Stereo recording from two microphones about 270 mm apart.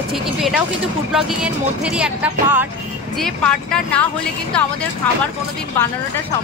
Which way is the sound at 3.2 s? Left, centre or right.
Centre.